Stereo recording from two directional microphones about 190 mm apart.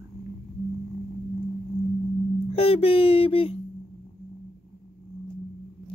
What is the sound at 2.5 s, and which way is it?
Speech, 30° left (ahead or behind).